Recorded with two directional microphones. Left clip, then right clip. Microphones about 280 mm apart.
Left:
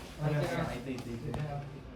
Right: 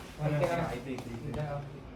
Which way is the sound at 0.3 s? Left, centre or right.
Centre.